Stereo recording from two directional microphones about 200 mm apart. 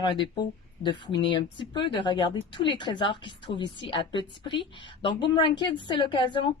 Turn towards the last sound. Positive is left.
turn(degrees=25)  # may be behind; listen again after turning